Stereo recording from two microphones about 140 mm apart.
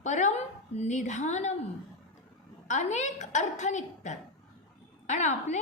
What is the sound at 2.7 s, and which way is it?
A woman's voice, 60° left (ahead or behind).